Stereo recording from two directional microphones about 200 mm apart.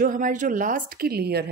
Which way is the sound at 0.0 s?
40° right (ahead or behind).